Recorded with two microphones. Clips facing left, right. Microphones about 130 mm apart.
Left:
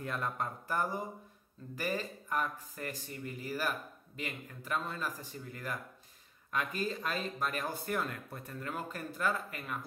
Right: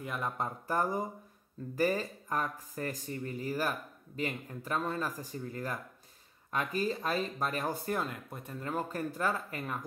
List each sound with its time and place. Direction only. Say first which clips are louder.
0.0 s speech: right 1 dB; 10° right (ahead or behind)
0.4 s speech: right 6 dB; 30° right (ahead or behind)
8.0 s speech: right 1 dB; 20° right (ahead or behind); by 9.8 s 35° right (ahead or behind)